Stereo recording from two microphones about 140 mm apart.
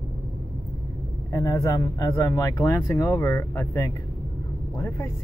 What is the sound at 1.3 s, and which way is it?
Speech, 20° left (ahead or behind).